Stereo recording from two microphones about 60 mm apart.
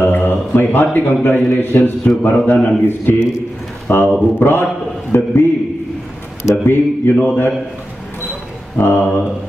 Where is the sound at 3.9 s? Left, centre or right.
Left.